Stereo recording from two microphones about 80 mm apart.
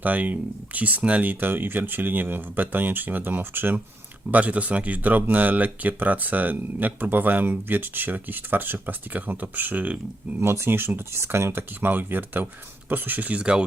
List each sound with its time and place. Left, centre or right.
0.0 s speech: right
10.4 s speech: right; by 13.7 s centre